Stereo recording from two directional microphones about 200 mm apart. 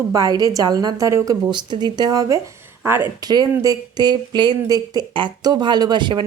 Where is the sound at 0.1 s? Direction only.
20° right (ahead or behind).